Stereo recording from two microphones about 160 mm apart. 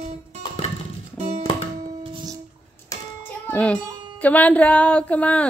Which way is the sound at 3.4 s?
10° left (ahead or behind).